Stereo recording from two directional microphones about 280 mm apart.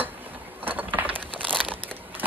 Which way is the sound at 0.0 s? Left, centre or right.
Centre.